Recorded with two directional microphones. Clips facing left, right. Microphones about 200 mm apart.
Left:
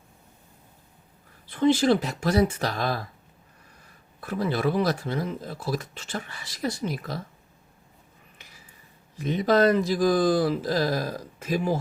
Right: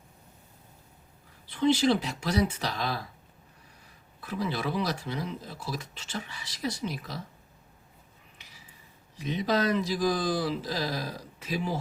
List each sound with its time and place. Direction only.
1.5 s speech: 50° left (ahead or behind)
8.4 s a sound: 50° left (ahead or behind)
9.1 s speech: 50° left (ahead or behind)